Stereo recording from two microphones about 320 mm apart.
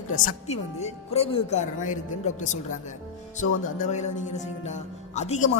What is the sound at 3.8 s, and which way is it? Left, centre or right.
A woman's voice, left.